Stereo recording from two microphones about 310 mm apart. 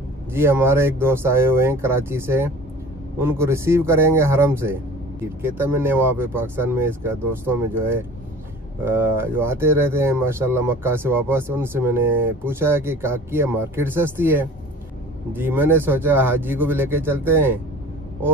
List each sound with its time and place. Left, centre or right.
0.3 s speech: centre